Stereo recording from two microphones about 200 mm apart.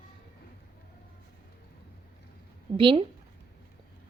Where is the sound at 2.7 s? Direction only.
25° right (ahead or behind).